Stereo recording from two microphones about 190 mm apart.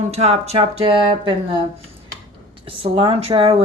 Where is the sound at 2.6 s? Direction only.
30° right (ahead or behind).